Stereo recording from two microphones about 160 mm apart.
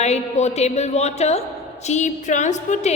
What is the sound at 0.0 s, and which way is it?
A woman's voice, 45° left (ahead or behind).